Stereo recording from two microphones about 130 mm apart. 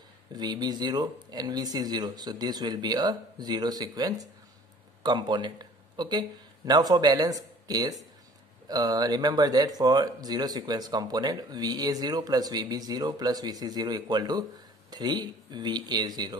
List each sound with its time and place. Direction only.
0.3 s speech: 30° right (ahead or behind)